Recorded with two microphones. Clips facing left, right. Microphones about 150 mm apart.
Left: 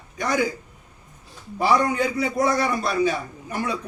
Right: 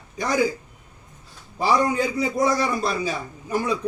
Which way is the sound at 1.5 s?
30° right (ahead or behind).